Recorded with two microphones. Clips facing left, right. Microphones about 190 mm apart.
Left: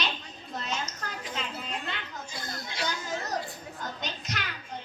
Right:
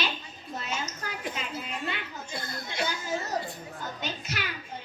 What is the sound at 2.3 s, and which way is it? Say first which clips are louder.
Chatter: right 5 dB; 55° right (ahead or behind).